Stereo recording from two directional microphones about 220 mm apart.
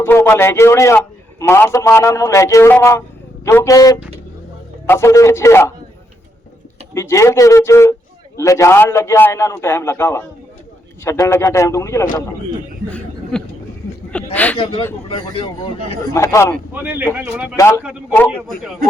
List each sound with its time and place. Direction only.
0.0 s a man's voice: 10° left (ahead or behind)
6.9 s a man's voice: 15° left (ahead or behind)
13.3 s a man's voice: 5° left (ahead or behind)
14.6 s speech: 25° left (ahead or behind)
16.1 s a man's voice: 15° left (ahead or behind)
16.7 s speech: 10° right (ahead or behind)
17.6 s a man's voice: 10° left (ahead or behind)